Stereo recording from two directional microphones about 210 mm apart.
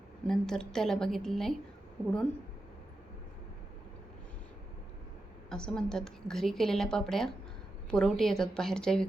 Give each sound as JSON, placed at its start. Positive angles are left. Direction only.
{"t": 0.3, "sound": "a woman's voice", "side_deg": 5}
{"t": 5.5, "sound": "a woman's voice", "side_deg": 5}